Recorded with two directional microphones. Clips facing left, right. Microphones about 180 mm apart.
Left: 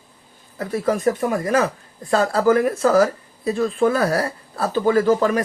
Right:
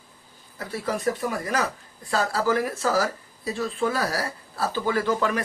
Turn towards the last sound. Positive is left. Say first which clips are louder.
# left 7 dB
turn(degrees=40)  # may be behind; listen again after turning